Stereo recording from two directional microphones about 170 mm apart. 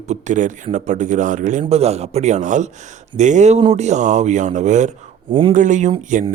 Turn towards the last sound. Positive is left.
turn(degrees=-50)  # may be behind; listen again after turning